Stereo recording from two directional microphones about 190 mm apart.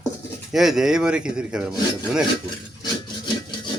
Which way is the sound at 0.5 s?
Centre (ahead or behind).